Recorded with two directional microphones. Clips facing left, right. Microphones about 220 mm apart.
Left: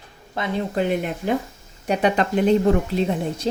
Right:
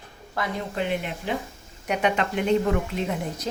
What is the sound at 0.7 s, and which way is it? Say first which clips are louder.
Speech: left 5 dB; 40° left (ahead or behind).